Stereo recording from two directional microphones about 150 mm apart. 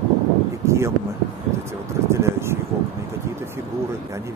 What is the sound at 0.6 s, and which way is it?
Speech, 20° right (ahead or behind).